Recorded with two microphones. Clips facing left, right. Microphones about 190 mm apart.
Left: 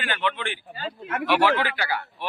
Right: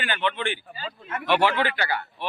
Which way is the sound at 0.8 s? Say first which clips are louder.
Left 4 dB; 65° left (ahead or behind).